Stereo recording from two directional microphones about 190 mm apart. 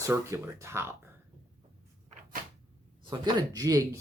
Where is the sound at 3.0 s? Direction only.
20° right (ahead or behind).